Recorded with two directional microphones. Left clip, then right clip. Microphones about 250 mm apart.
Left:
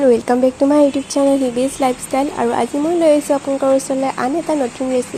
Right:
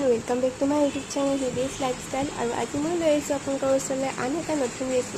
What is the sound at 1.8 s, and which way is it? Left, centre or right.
Speech, left.